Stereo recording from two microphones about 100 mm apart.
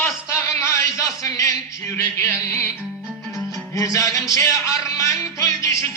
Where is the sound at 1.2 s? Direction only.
35° left (ahead or behind).